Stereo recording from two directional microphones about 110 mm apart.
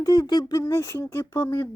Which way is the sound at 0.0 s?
35° left (ahead or behind).